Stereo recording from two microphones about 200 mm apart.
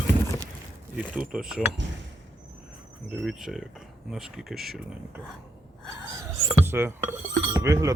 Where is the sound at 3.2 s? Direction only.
Centre (ahead or behind).